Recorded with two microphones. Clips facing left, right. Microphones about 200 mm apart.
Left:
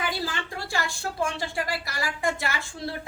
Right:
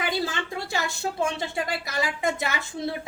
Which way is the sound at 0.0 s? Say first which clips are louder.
Right 3 dB; 25° right (ahead or behind).